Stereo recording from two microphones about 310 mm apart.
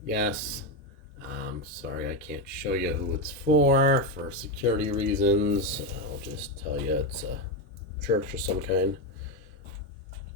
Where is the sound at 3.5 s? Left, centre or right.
Right.